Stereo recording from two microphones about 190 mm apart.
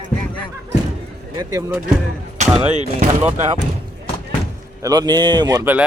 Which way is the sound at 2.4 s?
30° right (ahead or behind).